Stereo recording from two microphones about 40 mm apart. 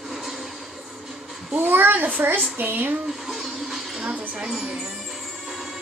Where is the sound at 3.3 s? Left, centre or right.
Centre.